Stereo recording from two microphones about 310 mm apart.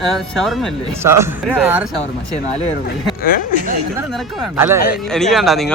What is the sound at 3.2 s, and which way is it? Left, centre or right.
Speech, left.